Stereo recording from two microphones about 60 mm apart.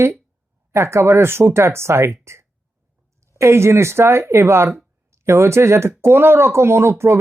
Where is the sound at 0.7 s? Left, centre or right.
Right.